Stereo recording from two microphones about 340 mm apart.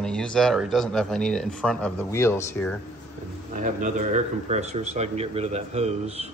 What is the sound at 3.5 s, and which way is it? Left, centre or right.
Speech, right.